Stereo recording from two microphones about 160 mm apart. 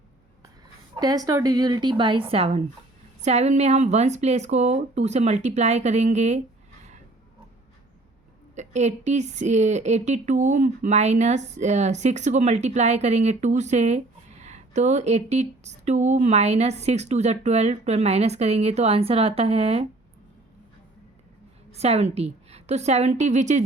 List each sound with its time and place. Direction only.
0.9 s a woman's voice: 25° right (ahead or behind); by 6.4 s 45° right (ahead or behind)
8.5 s a woman's voice: 45° right (ahead or behind)
21.7 s a woman's voice: 40° right (ahead or behind)